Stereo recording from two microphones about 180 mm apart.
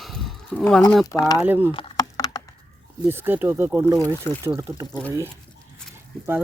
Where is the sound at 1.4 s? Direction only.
10° right (ahead or behind).